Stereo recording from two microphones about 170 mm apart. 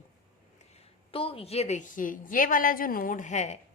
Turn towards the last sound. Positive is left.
turn(degrees=45)  # may be behind; listen again after turning